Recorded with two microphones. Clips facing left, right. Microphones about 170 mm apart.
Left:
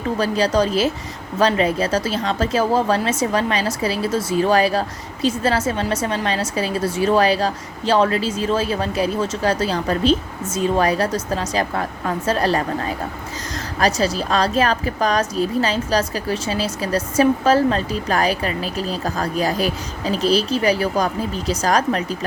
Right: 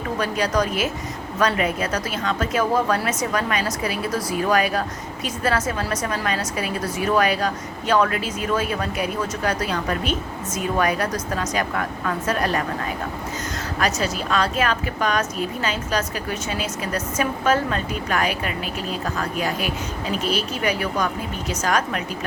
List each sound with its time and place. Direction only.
0.2 s a woman's voice: 30° left (ahead or behind)
13.7 s a woman's voice: 35° left (ahead or behind)